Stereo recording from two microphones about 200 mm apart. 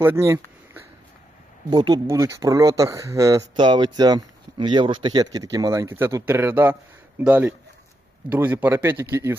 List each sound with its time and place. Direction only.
0.0 s speech: 10° right (ahead or behind)
1.7 s speech: 20° right (ahead or behind)